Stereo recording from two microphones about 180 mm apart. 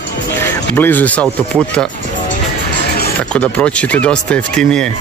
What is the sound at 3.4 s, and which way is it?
Speech, 5° left (ahead or behind).